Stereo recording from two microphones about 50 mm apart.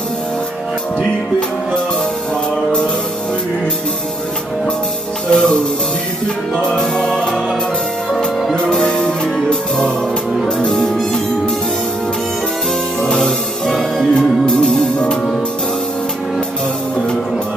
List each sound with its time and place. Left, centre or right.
5.3 s music: centre
6.6 s music: centre
8.5 s music: centre
13.0 s music: centre